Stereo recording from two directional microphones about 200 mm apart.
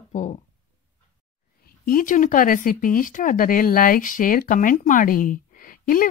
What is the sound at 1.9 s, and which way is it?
Speech, 40° left (ahead or behind).